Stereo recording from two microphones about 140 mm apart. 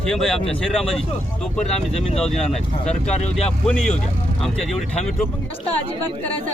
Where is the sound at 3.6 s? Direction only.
5° left (ahead or behind).